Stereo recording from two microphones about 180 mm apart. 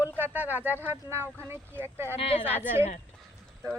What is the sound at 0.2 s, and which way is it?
Speech, 10° right (ahead or behind).